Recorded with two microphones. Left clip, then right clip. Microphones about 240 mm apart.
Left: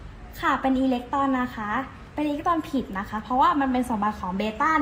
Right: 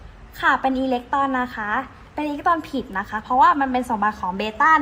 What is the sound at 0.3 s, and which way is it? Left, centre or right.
A woman's voice, right.